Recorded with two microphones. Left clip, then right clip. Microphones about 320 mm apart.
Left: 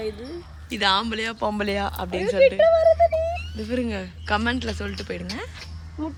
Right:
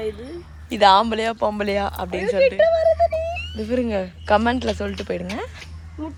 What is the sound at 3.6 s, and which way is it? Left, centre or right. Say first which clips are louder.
Speech: right 5 dB; centre.